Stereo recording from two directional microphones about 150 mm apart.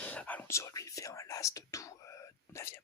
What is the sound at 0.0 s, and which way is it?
Whispering, 10° left (ahead or behind).